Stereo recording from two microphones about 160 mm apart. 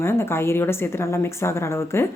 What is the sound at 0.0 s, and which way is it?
A woman's voice, 15° left (ahead or behind).